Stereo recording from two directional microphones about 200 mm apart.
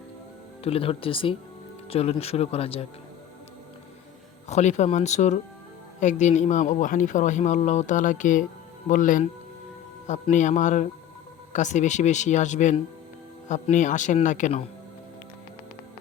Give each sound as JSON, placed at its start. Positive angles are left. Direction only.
{"t": 0.6, "sound": "speech", "side_deg": 30}
{"t": 4.4, "sound": "speech", "side_deg": 35}